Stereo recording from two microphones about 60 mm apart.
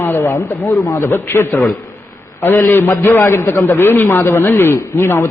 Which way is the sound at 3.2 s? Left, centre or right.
Left.